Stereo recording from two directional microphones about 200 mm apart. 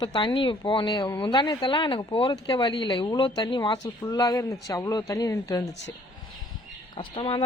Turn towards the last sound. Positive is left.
turn(degrees=25)  # may be behind; listen again after turning